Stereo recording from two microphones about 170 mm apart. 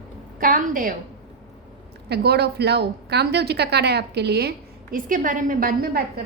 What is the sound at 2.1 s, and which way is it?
A woman's voice, 70° right (ahead or behind).